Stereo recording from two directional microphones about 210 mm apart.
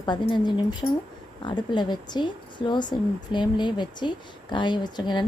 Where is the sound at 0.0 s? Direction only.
20° left (ahead or behind).